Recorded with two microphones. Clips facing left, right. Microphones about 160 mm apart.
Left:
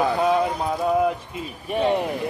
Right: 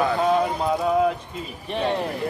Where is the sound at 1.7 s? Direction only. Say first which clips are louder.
Left 3 dB; 10° left (ahead or behind).